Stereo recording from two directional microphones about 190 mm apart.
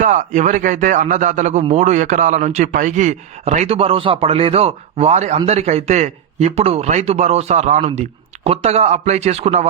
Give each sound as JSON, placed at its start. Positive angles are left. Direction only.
{"t": 0.0, "sound": "speech", "side_deg": -40}